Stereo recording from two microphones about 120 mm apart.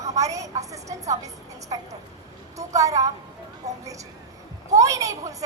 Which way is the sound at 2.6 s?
25° right (ahead or behind).